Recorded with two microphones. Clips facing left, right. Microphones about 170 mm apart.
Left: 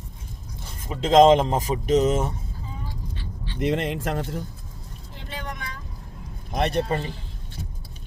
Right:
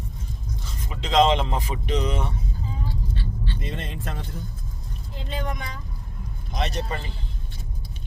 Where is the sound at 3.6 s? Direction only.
75° left (ahead or behind).